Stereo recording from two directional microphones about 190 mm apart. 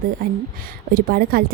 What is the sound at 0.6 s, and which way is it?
Speech, 50° right (ahead or behind).